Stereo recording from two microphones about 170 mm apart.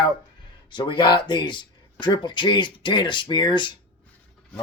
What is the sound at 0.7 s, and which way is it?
Speech, 25° left (ahead or behind).